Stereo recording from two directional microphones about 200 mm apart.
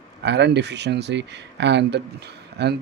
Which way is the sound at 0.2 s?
60° right (ahead or behind).